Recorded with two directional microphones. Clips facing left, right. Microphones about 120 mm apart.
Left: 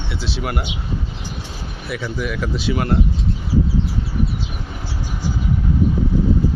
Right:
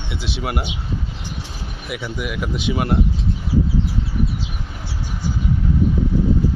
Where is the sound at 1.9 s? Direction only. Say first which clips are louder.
Left 2 dB; 15° right (ahead or behind).